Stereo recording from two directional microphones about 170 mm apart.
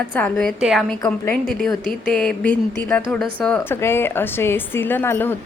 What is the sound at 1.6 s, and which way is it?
A woman's voice, 5° left (ahead or behind).